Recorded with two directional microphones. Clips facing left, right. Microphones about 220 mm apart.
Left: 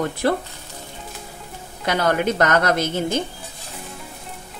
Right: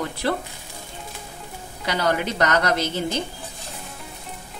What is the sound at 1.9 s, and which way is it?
Speech, 50° left (ahead or behind).